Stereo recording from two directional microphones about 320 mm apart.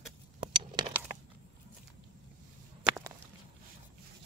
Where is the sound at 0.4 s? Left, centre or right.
Centre.